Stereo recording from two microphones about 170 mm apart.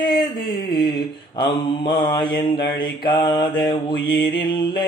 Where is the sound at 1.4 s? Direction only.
25° left (ahead or behind).